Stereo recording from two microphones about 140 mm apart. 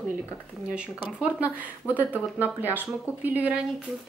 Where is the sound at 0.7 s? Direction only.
10° right (ahead or behind).